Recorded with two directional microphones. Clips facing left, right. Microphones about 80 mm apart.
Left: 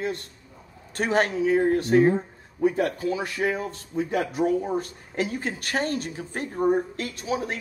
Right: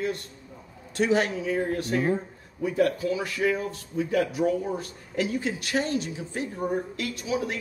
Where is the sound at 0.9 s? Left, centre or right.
Left.